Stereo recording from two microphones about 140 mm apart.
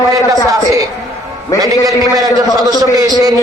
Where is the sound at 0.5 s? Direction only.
25° right (ahead or behind).